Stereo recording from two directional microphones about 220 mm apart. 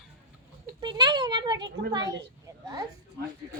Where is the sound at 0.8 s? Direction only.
20° right (ahead or behind).